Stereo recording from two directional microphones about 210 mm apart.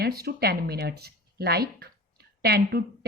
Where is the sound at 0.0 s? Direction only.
50° right (ahead or behind).